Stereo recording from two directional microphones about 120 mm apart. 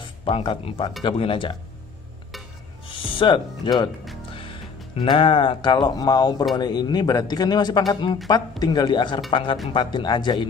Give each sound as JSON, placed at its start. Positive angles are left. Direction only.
{"t": 0.2, "sound": "speech", "side_deg": 45}
{"t": 2.9, "sound": "speech", "side_deg": 40}
{"t": 4.9, "sound": "speech", "side_deg": 45}